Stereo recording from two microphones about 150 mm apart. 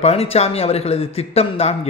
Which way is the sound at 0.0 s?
40° left (ahead or behind).